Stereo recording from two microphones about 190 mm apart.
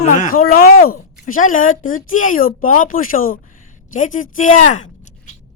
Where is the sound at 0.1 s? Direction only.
45° left (ahead or behind).